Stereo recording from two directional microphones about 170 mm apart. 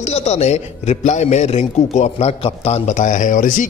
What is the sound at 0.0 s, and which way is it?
A man's voice, 40° left (ahead or behind).